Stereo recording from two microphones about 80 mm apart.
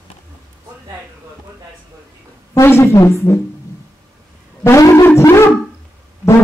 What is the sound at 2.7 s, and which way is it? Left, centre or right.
Music, left.